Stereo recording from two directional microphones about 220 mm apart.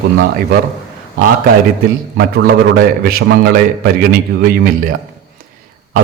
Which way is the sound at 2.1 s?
45° right (ahead or behind).